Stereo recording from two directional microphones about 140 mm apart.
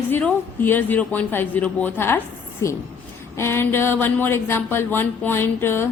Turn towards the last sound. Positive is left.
turn(degrees=15)  # may be behind; listen again after turning